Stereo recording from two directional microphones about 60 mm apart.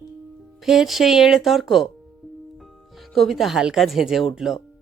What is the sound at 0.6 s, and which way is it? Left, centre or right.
Speech, centre.